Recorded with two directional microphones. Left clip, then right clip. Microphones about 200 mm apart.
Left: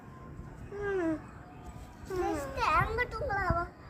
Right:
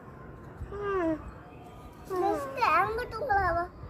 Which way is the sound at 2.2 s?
15° left (ahead or behind).